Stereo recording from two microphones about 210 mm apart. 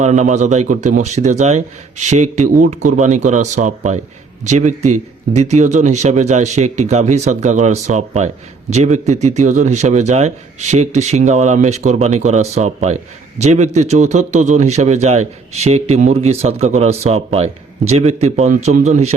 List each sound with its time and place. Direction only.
0.0 s a man's voice: 35° right (ahead or behind)